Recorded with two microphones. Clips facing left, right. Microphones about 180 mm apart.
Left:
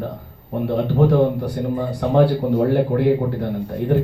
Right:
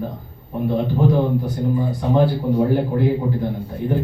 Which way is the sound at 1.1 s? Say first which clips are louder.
Left 2 dB; 70° left (ahead or behind).